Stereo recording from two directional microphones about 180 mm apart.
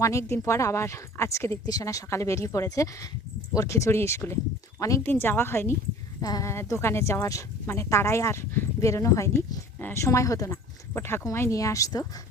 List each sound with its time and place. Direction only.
0.0 s a woman's voice: 15° left (ahead or behind)